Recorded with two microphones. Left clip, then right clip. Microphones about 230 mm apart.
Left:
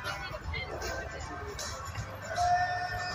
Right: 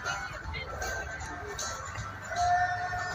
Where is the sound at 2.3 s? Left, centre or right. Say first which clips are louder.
Right 1 dB; left.